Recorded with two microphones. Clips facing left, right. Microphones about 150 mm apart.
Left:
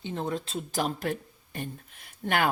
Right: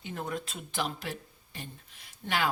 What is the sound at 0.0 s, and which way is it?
Speech, 25° left (ahead or behind).